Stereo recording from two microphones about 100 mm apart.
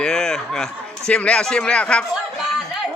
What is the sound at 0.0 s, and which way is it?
A man's voice, 5° left (ahead or behind).